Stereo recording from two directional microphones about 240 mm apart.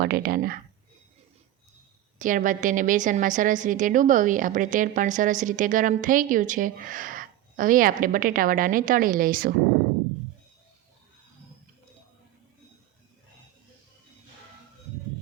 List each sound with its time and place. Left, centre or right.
0.0 s a woman's voice: right
2.1 s a woman's voice: right